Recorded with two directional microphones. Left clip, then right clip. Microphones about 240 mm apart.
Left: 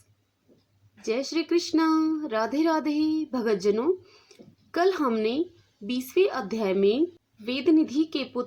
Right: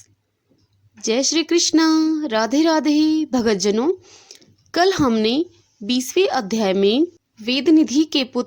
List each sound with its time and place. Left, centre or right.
1.0 s speech: right